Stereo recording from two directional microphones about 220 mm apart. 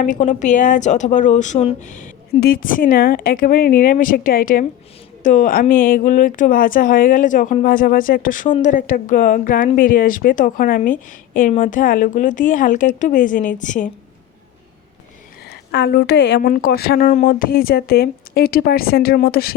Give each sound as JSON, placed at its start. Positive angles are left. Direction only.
{"t": 0.0, "sound": "a woman's voice", "side_deg": 35}
{"t": 15.4, "sound": "a woman's voice", "side_deg": 50}